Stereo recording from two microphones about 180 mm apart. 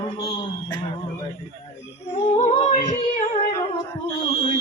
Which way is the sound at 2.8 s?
25° left (ahead or behind).